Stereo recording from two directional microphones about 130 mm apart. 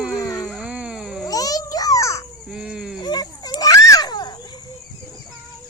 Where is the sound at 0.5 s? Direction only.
10° right (ahead or behind).